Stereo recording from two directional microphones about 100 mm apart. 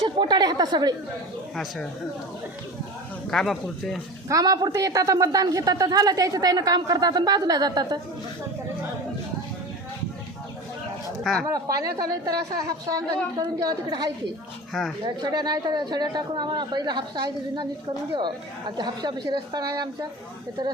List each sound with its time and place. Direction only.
0.0 s a woman's voice: 50° right (ahead or behind)
3.2 s speech: 5° left (ahead or behind)
4.3 s a woman's voice: 35° right (ahead or behind)
11.2 s a woman's voice: 5° left (ahead or behind)
11.4 s a woman's voice: 35° right (ahead or behind)
14.7 s a woman's voice: 5° left (ahead or behind)
15.0 s speech: 45° right (ahead or behind)